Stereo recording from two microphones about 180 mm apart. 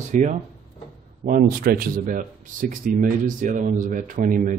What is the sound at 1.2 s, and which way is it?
Speech, 55° right (ahead or behind).